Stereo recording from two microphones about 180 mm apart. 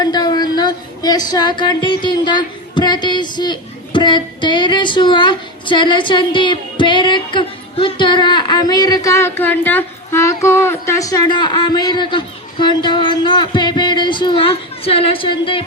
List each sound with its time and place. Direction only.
0.0 s a woman's voice: 25° left (ahead or behind)